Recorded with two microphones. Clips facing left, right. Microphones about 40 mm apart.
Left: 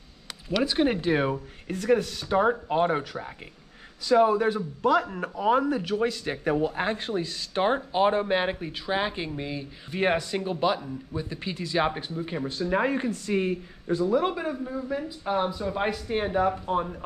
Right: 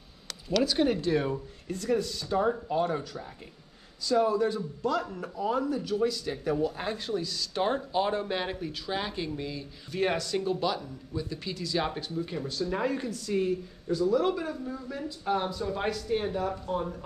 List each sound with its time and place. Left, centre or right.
0.5 s speech: left